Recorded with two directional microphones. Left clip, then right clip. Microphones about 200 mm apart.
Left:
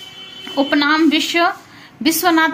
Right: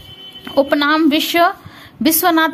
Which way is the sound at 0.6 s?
55° right (ahead or behind).